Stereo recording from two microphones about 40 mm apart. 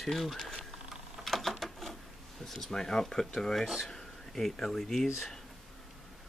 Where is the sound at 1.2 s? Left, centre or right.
Centre.